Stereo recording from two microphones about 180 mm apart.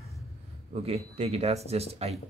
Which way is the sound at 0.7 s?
35° right (ahead or behind).